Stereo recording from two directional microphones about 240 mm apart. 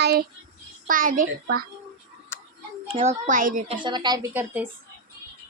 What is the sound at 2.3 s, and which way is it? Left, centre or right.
Tick, centre.